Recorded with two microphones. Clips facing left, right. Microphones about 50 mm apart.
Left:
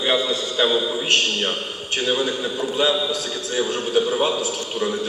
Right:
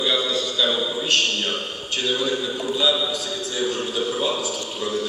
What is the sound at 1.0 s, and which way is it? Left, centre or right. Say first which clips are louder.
A man's voice: left 2 dB; left.